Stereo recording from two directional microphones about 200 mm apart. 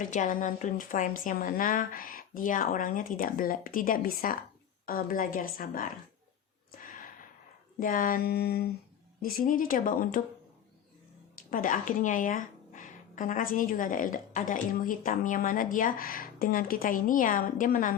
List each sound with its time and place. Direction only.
0.0 s a woman's voice: 40° left (ahead or behind)
6.7 s gasp: 45° left (ahead or behind)
7.8 s a woman's voice: 45° left (ahead or behind)
11.5 s a woman's voice: 40° left (ahead or behind)